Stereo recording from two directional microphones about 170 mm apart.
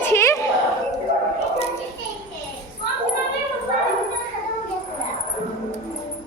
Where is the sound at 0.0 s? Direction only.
15° left (ahead or behind).